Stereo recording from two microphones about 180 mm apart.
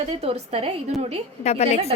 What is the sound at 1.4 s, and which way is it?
Speech, 35° left (ahead or behind).